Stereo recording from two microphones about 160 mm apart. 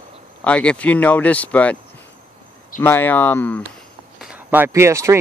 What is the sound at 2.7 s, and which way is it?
Speech, 15° left (ahead or behind).